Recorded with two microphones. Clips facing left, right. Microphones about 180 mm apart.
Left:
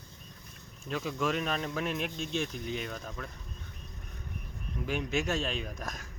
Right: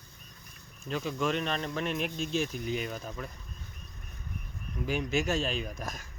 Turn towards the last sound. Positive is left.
turn(degrees=0)  # may be behind; listen again after turning